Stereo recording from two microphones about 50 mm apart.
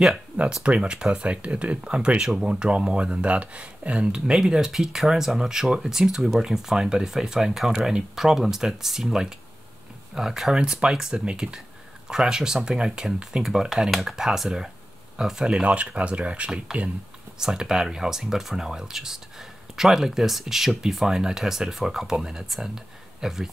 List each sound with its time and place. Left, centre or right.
0.7 s speech: centre
17.4 s speech: centre